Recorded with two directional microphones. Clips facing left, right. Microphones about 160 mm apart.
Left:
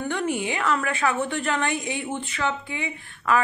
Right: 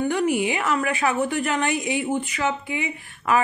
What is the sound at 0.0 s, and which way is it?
A woman's voice, 10° right (ahead or behind).